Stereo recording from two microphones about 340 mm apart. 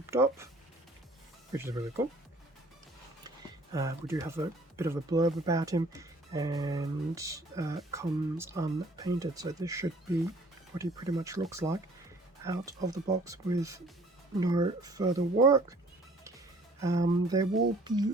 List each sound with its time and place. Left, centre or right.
0.1 s speech: centre
1.5 s speech: centre
3.2 s speech: centre
16.8 s speech: centre